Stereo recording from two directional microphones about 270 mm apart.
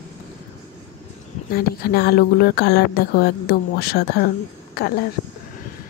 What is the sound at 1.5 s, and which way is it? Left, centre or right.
Speech, left.